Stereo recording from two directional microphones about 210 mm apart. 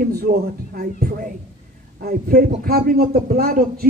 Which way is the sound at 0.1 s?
45° right (ahead or behind).